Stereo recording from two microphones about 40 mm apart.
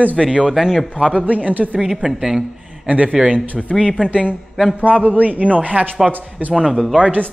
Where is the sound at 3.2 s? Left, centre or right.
Right.